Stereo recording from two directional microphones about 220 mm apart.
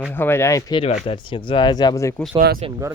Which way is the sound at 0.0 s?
10° left (ahead or behind).